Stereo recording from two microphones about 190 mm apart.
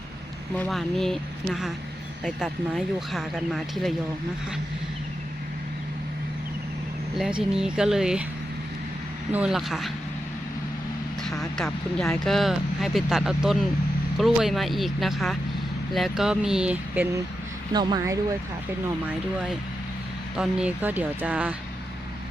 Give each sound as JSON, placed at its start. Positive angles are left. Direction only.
{"t": 0.5, "sound": "speech", "side_deg": 5}
{"t": 7.2, "sound": "speech", "side_deg": -5}
{"t": 9.3, "sound": "speech", "side_deg": -5}
{"t": 11.2, "sound": "speech", "side_deg": 0}
{"t": 17.7, "sound": "speech", "side_deg": -20}
{"t": 20.3, "sound": "speech", "side_deg": -5}